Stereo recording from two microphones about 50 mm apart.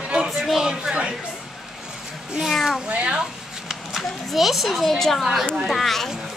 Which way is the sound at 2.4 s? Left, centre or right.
Centre.